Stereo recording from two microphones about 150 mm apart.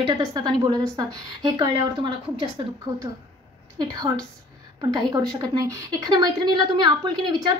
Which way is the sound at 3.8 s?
25° right (ahead or behind).